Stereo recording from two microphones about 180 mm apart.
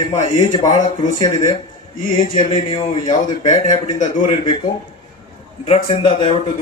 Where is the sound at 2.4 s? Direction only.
30° left (ahead or behind).